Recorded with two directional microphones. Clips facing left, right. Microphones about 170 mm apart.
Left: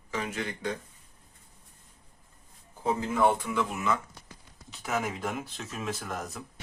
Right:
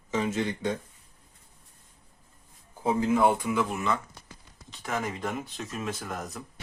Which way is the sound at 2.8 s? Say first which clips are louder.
Right 2 dB; 10° right (ahead or behind).